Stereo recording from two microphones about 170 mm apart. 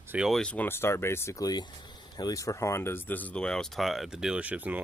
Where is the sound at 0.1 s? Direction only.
5° right (ahead or behind).